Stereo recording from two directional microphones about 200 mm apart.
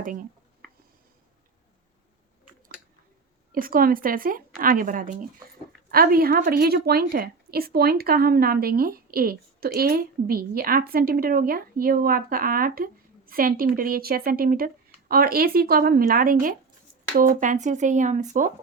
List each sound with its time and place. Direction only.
0.0 s speech: 40° right (ahead or behind)
3.5 s a woman's voice: 45° right (ahead or behind)